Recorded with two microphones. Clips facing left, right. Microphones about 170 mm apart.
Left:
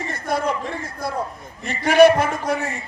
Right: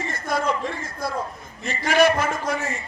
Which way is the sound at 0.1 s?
60° left (ahead or behind).